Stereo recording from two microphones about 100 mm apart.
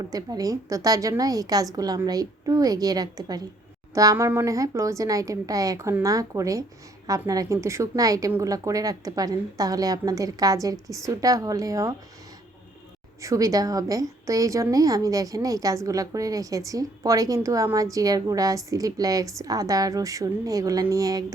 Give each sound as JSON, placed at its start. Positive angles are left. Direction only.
{"t": 0.1, "sound": "a woman's voice", "side_deg": -40}
{"t": 13.2, "sound": "a woman's voice", "side_deg": -35}